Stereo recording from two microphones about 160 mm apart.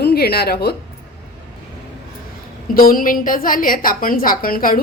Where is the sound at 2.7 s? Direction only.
65° left (ahead or behind).